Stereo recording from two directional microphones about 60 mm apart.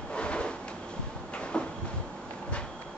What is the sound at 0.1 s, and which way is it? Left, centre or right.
Drawer open or close, centre.